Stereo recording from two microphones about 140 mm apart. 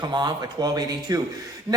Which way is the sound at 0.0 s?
30° right (ahead or behind).